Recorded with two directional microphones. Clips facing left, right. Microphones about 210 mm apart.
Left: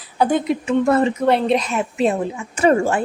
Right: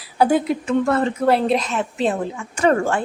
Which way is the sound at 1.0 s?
Centre (ahead or behind).